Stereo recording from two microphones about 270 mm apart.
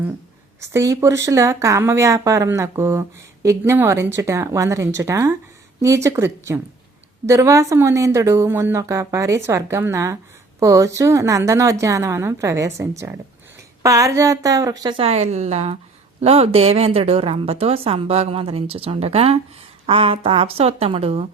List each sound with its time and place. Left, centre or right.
0.7 s a woman's voice: centre